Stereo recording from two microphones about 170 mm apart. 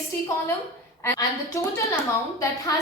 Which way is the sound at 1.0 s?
15° left (ahead or behind).